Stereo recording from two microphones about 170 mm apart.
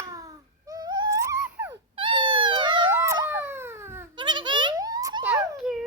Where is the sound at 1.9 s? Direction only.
30° right (ahead or behind).